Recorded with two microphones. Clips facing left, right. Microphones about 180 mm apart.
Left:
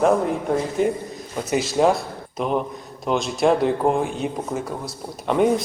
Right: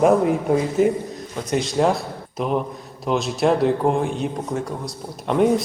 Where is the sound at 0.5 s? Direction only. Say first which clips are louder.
Right 2 dB; 5° right (ahead or behind).